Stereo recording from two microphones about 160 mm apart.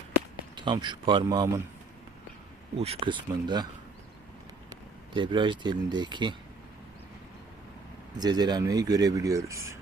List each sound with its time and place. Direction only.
0.5 s speech: 30° right (ahead or behind)
2.7 s speech: 40° right (ahead or behind)
4.7 s speech: 30° right (ahead or behind)
8.2 s speech: 25° right (ahead or behind)